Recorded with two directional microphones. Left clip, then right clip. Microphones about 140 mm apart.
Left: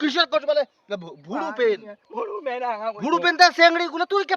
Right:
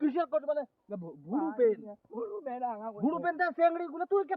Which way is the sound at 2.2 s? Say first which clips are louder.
Left 9 dB; 25° left (ahead or behind).